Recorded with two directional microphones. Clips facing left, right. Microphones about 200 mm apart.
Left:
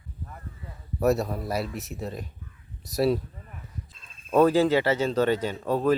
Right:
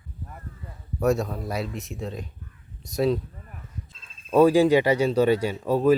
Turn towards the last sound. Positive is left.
turn(degrees=-10)  # may be behind; listen again after turning